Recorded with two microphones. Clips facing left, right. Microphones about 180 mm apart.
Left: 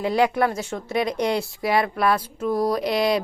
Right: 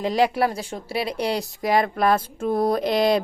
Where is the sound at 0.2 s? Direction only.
30° right (ahead or behind).